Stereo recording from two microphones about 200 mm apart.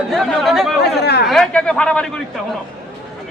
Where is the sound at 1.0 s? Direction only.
55° left (ahead or behind).